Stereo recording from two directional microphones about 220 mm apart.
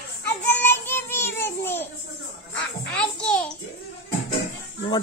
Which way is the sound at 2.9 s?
5° left (ahead or behind).